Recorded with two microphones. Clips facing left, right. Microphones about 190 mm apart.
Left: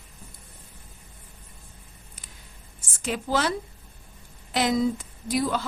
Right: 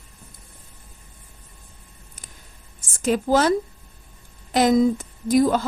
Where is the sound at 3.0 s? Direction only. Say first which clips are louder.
Right 7 dB; 45° right (ahead or behind).